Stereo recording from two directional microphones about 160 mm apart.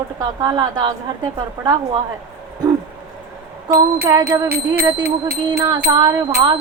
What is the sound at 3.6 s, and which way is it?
Speech, 25° right (ahead or behind).